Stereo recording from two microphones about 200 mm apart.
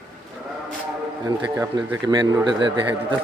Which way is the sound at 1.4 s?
20° right (ahead or behind).